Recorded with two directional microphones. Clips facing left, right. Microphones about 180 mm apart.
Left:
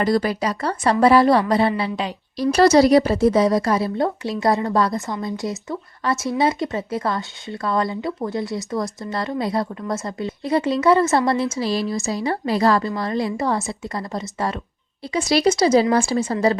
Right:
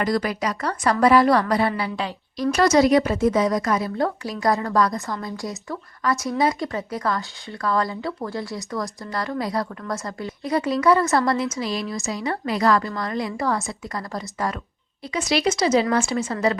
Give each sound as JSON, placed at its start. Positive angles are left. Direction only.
{"t": 0.0, "sound": "speech", "side_deg": 30}
{"t": 2.4, "sound": "speech", "side_deg": 35}